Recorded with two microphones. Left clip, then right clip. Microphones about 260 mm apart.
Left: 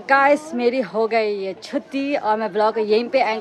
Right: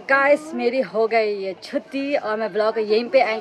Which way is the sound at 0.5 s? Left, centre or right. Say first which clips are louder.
Left 1 dB; centre.